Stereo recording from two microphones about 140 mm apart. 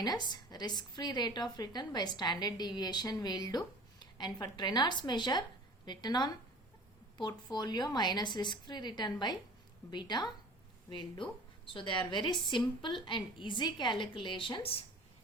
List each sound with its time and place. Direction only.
0.0 s a woman's voice: 30° left (ahead or behind)